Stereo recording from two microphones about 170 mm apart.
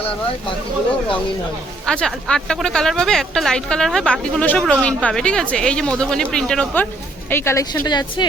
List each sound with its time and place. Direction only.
1.9 s a woman's voice: 5° left (ahead or behind); by 8.3 s 25° left (ahead or behind)